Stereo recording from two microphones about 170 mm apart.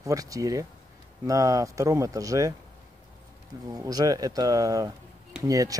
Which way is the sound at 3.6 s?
20° right (ahead or behind).